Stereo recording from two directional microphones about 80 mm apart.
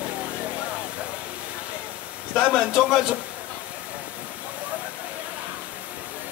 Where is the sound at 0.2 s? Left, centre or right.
Centre.